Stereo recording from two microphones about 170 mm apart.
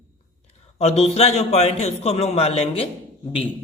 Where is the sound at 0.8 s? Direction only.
40° left (ahead or behind).